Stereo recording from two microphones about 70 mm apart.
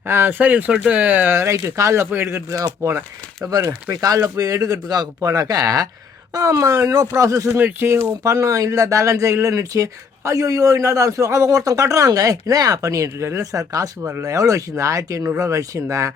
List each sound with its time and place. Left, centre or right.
0.1 s speech: right
0.3 s speech: right
1.5 s speech: right
4.0 s speech: right
6.3 s speech: right
7.5 s speech: right
8.2 s speech: right
14.0 s speech: right